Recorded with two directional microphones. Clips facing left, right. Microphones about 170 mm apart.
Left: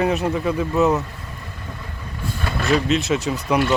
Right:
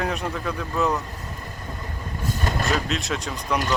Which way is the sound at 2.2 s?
40° right (ahead or behind).